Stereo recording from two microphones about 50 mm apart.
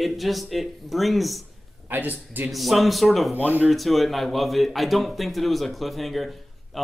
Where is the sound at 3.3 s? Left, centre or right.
Right.